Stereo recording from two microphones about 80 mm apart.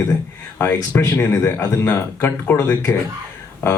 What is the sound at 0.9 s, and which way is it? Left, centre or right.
A man's voice, left.